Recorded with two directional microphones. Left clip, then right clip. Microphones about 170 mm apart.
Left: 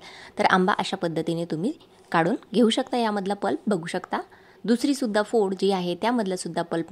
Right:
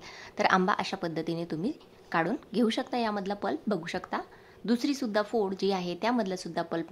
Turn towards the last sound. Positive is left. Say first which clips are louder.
# left 5 dB
turn(degrees=30)  # may be behind; listen again after turning